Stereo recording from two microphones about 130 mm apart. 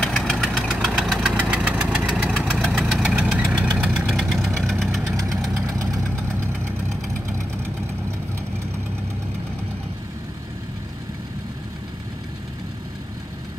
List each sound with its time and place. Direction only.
0.0 s engine: 10° left (ahead or behind); by 2.0 s 10° right (ahead or behind)
2.0 s engine: 5° left (ahead or behind)
5.0 s engine: 25° right (ahead or behind)